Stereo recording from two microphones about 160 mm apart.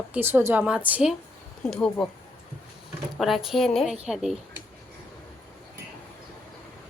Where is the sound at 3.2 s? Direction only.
Centre (ahead or behind).